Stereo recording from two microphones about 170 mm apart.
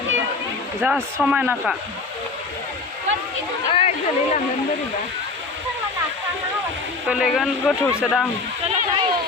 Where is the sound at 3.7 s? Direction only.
40° left (ahead or behind).